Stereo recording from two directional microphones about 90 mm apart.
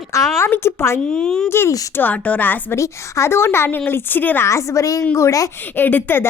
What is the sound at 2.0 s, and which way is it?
Speech, 15° left (ahead or behind).